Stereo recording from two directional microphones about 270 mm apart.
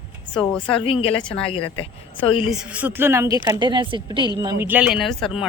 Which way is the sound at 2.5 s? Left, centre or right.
Centre.